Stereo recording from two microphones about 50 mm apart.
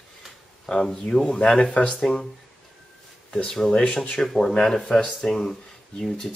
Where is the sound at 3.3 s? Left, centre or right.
Centre.